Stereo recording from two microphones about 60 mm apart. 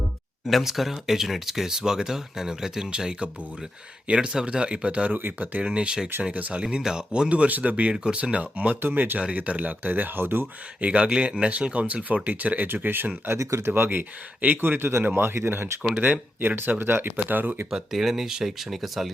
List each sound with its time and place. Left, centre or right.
0.4 s speech: centre
5.1 s speech: right
5.6 s speech: centre; by 9.1 s right
9.1 s speech: right
10.8 s speech: right
13.4 s speech: right
16.0 s speech: right
17.7 s speech: centre